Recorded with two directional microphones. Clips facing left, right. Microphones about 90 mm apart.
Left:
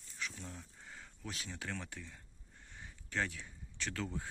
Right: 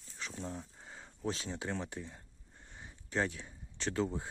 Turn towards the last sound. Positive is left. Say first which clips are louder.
# right 6 dB
turn(degrees=-20)  # may be behind; listen again after turning